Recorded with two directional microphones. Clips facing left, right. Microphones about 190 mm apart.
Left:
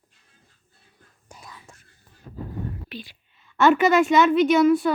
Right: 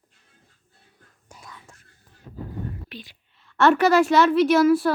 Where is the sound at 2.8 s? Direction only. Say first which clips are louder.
Left 3 dB; 5° left (ahead or behind).